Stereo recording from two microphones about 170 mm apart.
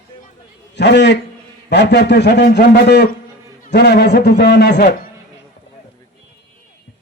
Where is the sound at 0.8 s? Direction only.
90° left.